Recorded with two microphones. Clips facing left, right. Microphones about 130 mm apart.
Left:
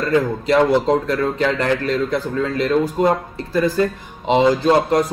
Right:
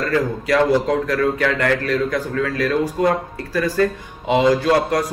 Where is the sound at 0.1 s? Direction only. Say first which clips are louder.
Left 3 dB; 20° left (ahead or behind).